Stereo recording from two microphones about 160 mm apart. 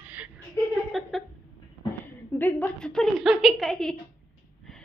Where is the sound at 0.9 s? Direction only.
Centre (ahead or behind).